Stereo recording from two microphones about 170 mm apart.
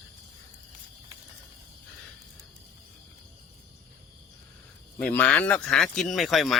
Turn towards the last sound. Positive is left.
turn(degrees=0)  # may be behind; listen again after turning